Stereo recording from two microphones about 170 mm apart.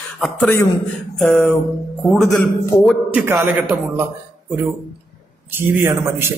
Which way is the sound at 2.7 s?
15° left (ahead or behind).